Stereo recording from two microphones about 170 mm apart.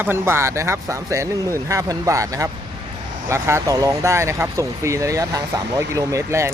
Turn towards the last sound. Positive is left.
turn(degrees=-15)  # may be behind; listen again after turning